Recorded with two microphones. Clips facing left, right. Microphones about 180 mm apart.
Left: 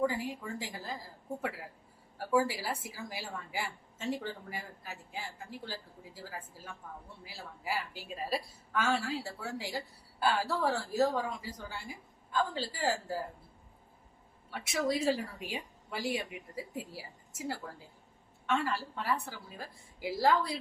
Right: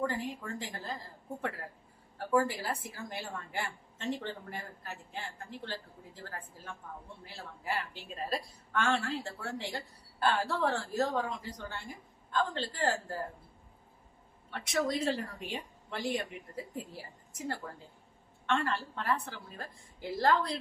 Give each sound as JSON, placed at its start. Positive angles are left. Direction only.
{"t": 0.0, "sound": "a woman's voice", "side_deg": 5}
{"t": 14.5, "sound": "a woman's voice", "side_deg": 5}